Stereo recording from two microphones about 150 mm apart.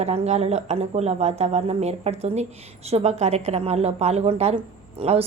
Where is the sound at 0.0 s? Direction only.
45° right (ahead or behind).